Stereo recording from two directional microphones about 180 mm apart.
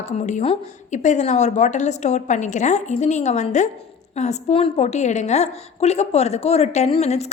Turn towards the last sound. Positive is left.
turn(degrees=35)  # may be behind; listen again after turning